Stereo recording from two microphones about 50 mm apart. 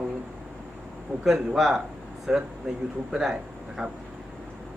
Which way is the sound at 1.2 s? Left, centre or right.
Centre.